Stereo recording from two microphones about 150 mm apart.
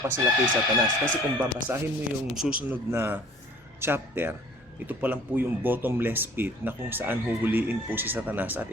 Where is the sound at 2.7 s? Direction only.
15° right (ahead or behind).